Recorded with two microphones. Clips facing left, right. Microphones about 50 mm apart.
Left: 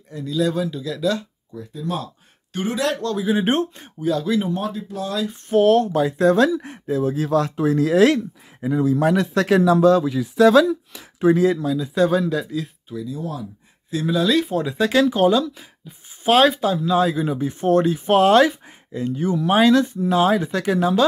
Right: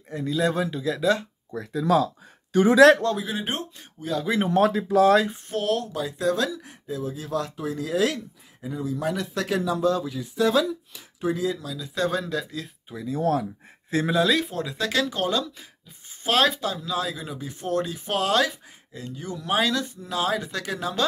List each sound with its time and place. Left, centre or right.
0.1 s speech: right
1.5 s speech: right
3.0 s speech: right
3.3 s speech: left
4.0 s speech: centre
4.5 s speech: right
5.6 s speech: left
11.8 s speech: centre
12.9 s speech: right
13.2 s speech: right
14.2 s speech: centre
14.6 s speech: centre